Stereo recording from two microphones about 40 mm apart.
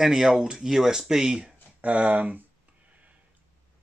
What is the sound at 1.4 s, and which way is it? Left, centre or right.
Speech, right.